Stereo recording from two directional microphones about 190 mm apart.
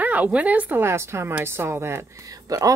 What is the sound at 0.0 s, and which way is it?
A woman's voice, 10° right (ahead or behind).